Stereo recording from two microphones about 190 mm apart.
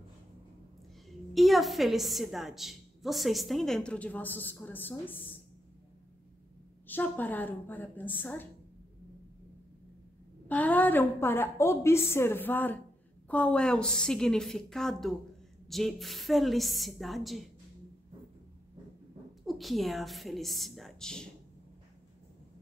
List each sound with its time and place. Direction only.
1.3 s a woman's voice: centre (ahead or behind)
6.9 s a woman's voice: 10° left (ahead or behind)
10.5 s a woman's voice: 10° left (ahead or behind)
19.4 s a woman's voice: centre (ahead or behind)